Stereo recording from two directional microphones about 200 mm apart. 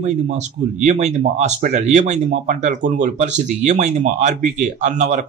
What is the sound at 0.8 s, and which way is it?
Speech, 35° right (ahead or behind).